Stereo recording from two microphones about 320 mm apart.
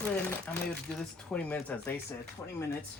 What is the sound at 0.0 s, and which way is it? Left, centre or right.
Speech, centre.